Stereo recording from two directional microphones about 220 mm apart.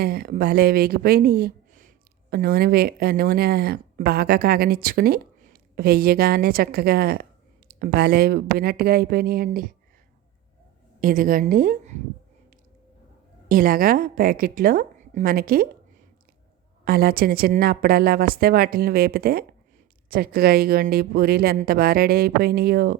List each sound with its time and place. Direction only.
0.0 s speech: 45° right (ahead or behind)
11.0 s a woman's voice: 40° right (ahead or behind)
13.5 s a woman's voice: 40° right (ahead or behind)
16.8 s speech: 45° right (ahead or behind)